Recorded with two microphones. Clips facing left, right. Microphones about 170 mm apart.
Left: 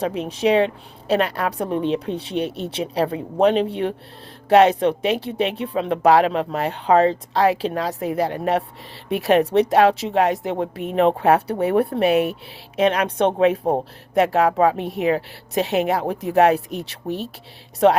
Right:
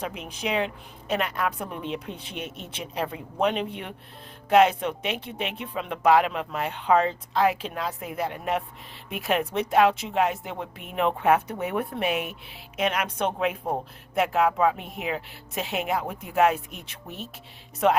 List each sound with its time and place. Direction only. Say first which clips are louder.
0.0 s a woman's voice: left 11 dB; 35° left (ahead or behind)